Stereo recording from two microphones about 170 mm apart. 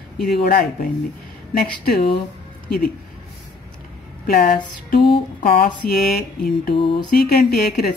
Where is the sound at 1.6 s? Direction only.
60° left (ahead or behind).